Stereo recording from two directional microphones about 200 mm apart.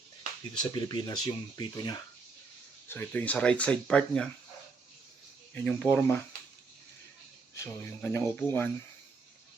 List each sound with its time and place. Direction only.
0.6 s speech: 20° left (ahead or behind)
2.9 s speech: 10° left (ahead or behind)
5.5 s speech: 5° left (ahead or behind)
7.5 s speech: 10° left (ahead or behind)